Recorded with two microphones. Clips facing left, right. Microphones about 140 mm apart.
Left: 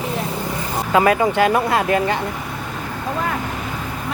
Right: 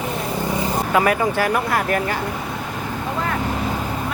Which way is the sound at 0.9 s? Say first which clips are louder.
Left 4 dB; 25° left (ahead or behind).